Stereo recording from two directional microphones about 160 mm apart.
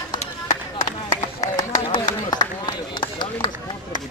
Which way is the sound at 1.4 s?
55° left (ahead or behind).